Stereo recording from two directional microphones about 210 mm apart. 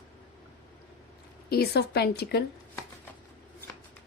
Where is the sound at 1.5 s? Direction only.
50° left (ahead or behind).